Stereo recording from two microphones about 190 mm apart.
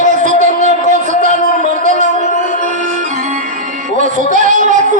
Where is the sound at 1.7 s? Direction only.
40° right (ahead or behind).